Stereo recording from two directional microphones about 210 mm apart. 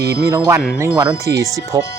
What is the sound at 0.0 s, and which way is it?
Speech, 50° right (ahead or behind).